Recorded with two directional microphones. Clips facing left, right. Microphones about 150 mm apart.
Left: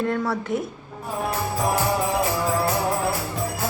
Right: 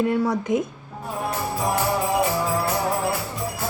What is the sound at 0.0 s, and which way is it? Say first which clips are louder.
Speech: right 3 dB; 15° right (ahead or behind).